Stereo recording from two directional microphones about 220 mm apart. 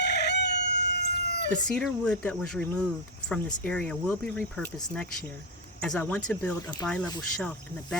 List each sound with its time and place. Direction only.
0.0 s chicken: 50° left (ahead or behind)
1.6 s speech: 5° left (ahead or behind)
5.8 s speech: 5° left (ahead or behind)